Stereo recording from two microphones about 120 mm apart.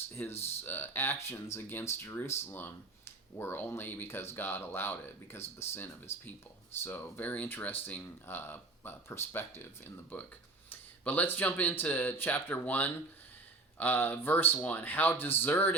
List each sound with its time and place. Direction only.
0.2 s speech: 10° left (ahead or behind)